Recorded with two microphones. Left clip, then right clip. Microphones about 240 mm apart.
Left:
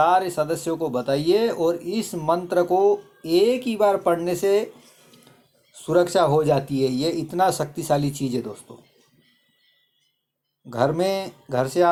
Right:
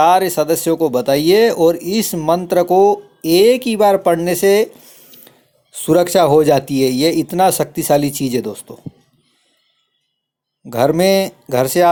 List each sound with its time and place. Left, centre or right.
0.0 s speech: right
5.1 s a sound: right
5.7 s speech: right
10.7 s speech: right